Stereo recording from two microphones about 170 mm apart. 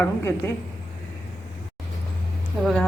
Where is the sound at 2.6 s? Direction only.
Centre (ahead or behind).